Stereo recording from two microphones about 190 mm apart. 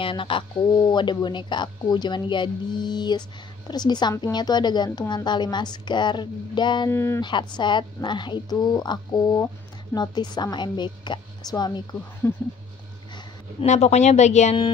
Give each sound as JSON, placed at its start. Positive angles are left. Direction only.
{"t": 0.0, "sound": "speech", "side_deg": 25}
{"t": 6.9, "sound": "speech", "side_deg": 15}
{"t": 7.2, "sound": "speech", "side_deg": 25}
{"t": 12.2, "sound": "speech", "side_deg": 10}
{"t": 13.1, "sound": "speech", "side_deg": 30}